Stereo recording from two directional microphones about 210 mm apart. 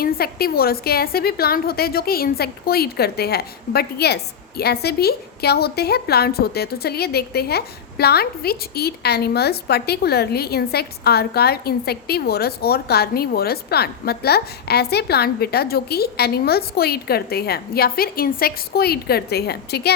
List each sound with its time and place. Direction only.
0.0 s a woman's voice: 45° left (ahead or behind)